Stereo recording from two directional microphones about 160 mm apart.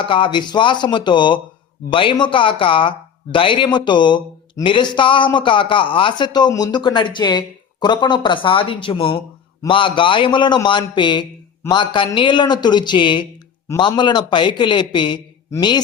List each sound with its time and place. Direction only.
0.0 s a man's voice: 30° left (ahead or behind)